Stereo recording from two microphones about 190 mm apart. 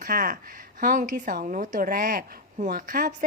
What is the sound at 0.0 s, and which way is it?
Speech, 50° right (ahead or behind).